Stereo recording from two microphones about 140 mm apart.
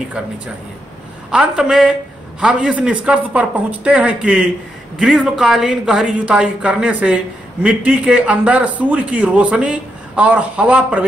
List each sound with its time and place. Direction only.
1.3 s a man's voice: 5° right (ahead or behind)